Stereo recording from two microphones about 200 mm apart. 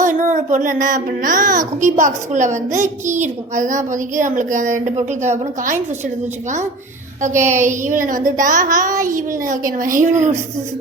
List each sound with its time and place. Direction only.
0.0 s child singing: 40° right (ahead or behind)
7.2 s child singing: 35° right (ahead or behind)